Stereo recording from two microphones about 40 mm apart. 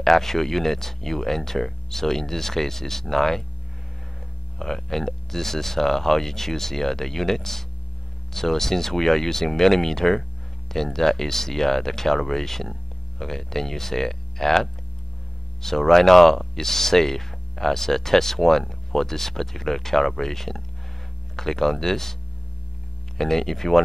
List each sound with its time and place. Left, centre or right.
0.0 s speech: centre
4.6 s speech: centre
23.1 s speech: centre